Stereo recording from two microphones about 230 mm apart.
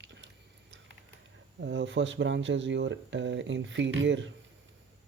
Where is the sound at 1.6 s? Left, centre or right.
Right.